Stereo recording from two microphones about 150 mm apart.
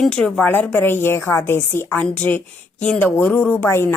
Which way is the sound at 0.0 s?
5° left (ahead or behind).